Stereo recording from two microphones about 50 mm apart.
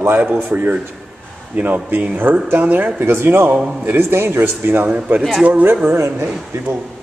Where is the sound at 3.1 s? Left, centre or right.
Right.